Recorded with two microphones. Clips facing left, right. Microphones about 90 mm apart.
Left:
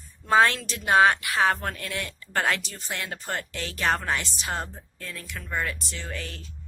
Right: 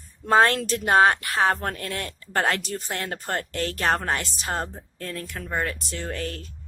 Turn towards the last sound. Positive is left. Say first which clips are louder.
# right 6 dB
turn(degrees=-45)  # may be behind; listen again after turning